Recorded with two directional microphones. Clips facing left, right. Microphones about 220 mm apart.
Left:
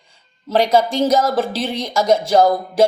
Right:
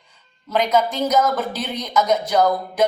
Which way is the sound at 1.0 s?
30° left (ahead or behind).